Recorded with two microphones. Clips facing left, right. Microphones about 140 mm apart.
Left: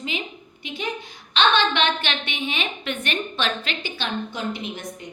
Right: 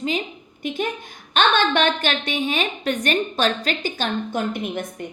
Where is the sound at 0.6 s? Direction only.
50° right (ahead or behind).